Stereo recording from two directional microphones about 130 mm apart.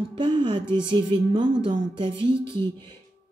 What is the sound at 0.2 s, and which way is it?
Speech, 35° right (ahead or behind).